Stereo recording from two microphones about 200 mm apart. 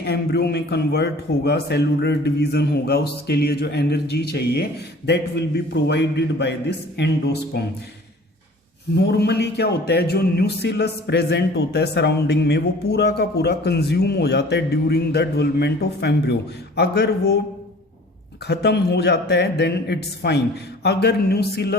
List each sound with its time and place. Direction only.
0.0 s a man's voice: 55° left (ahead or behind)
9.0 s speech: 55° left (ahead or behind)
18.4 s a man's voice: 55° left (ahead or behind)